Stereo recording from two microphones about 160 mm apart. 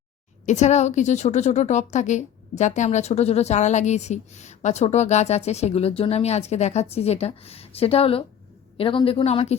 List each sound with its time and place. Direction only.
0.4 s a woman's voice: 45° left (ahead or behind)